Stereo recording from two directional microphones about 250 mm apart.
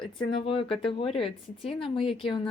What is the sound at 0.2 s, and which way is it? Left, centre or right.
Speech, centre.